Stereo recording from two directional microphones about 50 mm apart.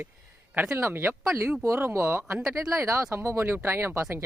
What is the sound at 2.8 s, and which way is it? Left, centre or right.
Speech, right.